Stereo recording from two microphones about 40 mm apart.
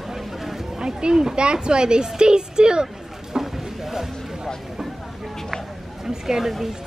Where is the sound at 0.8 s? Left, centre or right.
Centre.